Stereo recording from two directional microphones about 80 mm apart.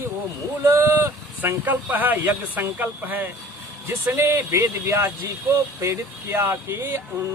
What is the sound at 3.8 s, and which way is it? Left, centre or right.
Speech, right.